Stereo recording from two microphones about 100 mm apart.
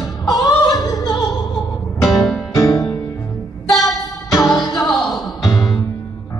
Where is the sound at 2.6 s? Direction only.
35° left (ahead or behind).